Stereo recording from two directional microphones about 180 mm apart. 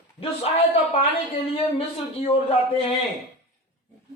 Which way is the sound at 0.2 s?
35° left (ahead or behind).